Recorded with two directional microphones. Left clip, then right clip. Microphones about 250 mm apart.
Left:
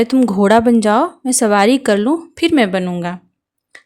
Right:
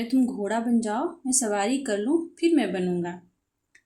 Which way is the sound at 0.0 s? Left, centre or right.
Left.